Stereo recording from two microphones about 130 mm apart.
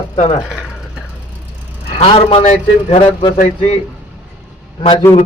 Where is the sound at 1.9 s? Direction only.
50° left (ahead or behind).